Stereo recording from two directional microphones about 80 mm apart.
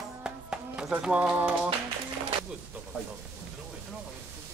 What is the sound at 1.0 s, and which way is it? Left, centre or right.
Speech, centre.